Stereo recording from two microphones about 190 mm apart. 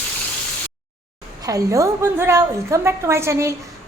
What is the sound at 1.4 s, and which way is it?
A woman's voice, 20° right (ahead or behind).